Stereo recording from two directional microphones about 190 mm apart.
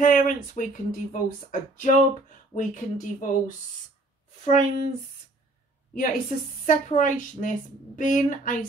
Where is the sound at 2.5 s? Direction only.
45° left (ahead or behind).